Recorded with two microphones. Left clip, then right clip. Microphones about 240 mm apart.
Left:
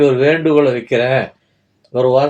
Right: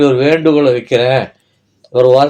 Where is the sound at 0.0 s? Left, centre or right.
Right.